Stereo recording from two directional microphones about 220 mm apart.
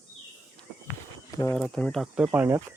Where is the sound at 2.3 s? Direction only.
10° right (ahead or behind).